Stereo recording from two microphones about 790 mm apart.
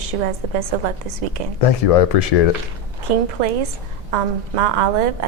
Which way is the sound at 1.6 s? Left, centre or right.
Left.